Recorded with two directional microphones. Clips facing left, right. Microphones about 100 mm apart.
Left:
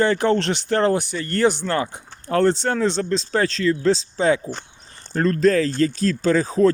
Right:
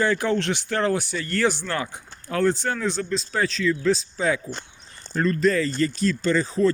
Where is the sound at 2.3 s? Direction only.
60° left (ahead or behind).